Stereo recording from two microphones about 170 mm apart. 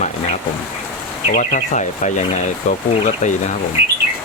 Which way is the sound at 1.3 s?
45° left (ahead or behind).